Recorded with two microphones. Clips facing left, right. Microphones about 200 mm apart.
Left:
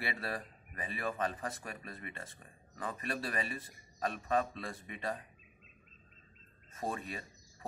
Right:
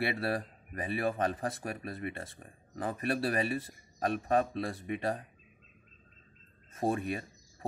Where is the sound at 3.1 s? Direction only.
40° right (ahead or behind).